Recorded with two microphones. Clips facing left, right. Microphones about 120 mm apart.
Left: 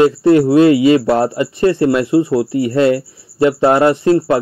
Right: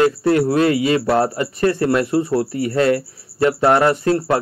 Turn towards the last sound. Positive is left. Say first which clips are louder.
# left 5 dB
turn(degrees=20)  # may be behind; listen again after turning